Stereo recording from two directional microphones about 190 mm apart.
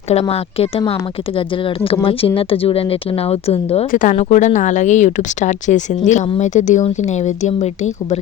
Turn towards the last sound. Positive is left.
turn(degrees=35)  # may be behind; listen again after turning